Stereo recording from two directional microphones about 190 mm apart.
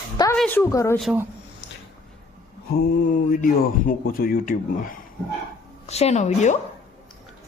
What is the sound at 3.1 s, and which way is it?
Speech, 45° left (ahead or behind).